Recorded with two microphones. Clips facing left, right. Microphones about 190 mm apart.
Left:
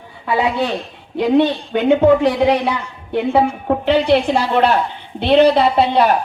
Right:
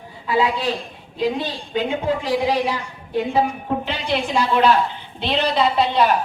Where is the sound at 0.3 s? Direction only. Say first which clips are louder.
Left 3 dB; 65° left (ahead or behind).